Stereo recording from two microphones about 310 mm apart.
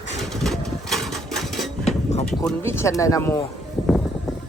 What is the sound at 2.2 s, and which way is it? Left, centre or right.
Speech, centre.